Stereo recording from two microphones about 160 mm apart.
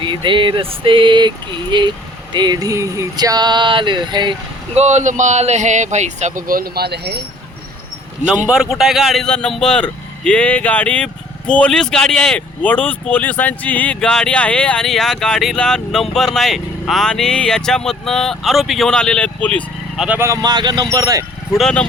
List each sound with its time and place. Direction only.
0.0 s a sound: 30° right (ahead or behind)
1.7 s speech: 30° right (ahead or behind)
4.7 s speech: 45° right (ahead or behind); by 7.2 s 90° right
8.4 s speech: 5° right (ahead or behind)
20.0 s speech: 10° right (ahead or behind)
21.5 s speech: 5° left (ahead or behind)